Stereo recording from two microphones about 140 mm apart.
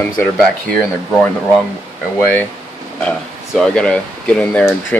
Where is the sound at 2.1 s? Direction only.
15° left (ahead or behind).